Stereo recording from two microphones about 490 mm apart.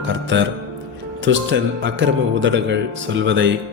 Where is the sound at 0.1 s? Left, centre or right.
Right.